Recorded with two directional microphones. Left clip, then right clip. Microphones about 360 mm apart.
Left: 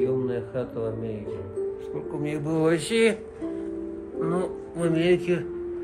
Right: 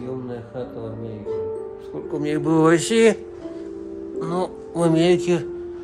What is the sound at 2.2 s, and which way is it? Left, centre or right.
Mantra, right.